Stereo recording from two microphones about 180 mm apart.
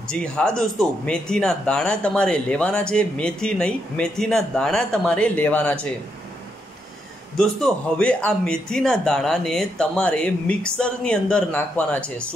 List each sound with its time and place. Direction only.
0.1 s speech: 5° left (ahead or behind)
7.3 s speech: 5° left (ahead or behind)